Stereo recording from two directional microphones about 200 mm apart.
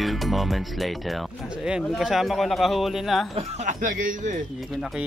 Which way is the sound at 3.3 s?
35° right (ahead or behind).